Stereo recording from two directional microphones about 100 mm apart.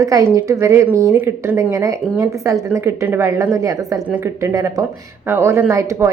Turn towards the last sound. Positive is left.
turn(degrees=-30)  # may be behind; listen again after turning